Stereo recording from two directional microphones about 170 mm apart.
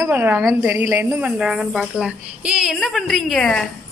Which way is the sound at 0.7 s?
10° right (ahead or behind).